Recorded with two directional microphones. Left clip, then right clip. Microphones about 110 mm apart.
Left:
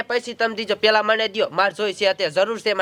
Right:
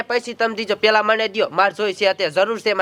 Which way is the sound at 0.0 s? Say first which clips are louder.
Right 2 dB; 15° left (ahead or behind).